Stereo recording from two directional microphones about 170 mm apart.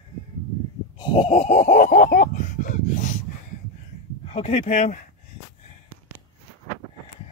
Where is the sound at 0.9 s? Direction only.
30° left (ahead or behind); by 3.2 s 50° left (ahead or behind).